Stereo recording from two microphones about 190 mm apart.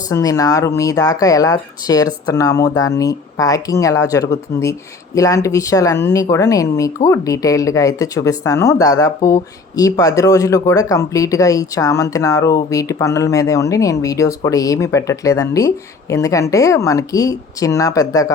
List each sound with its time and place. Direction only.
0.1 s speech: 20° left (ahead or behind)